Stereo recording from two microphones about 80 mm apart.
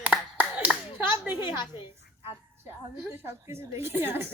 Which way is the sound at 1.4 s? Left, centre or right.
Left.